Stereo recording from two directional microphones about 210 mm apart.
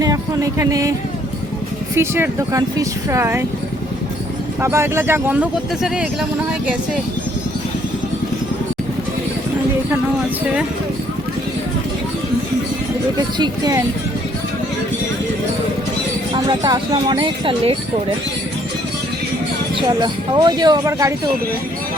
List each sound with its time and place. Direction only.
0.0 s music: 15° right (ahead or behind)
2.0 s speech: 10° right (ahead or behind)
4.6 s speech: 15° right (ahead or behind)
13.1 s speech: 20° right (ahead or behind)
16.3 s speech: 20° right (ahead or behind)
20.0 s speech: 20° right (ahead or behind)